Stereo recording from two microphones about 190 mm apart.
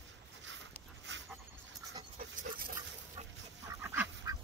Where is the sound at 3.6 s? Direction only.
10° right (ahead or behind).